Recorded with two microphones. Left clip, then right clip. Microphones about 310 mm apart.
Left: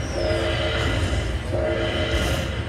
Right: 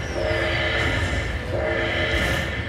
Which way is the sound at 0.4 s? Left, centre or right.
Centre.